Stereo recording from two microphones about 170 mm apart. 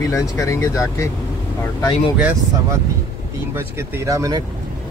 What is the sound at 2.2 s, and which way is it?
Speech, 10° right (ahead or behind).